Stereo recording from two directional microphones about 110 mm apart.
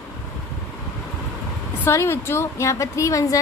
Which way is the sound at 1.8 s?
25° left (ahead or behind).